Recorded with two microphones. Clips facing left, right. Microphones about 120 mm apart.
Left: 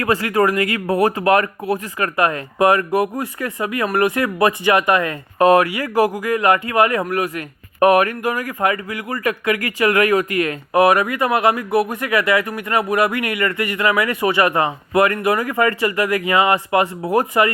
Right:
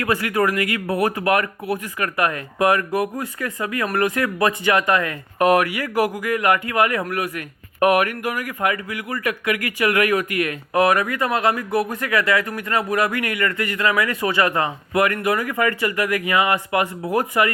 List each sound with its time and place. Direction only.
0.0 s speech: 35° left (ahead or behind)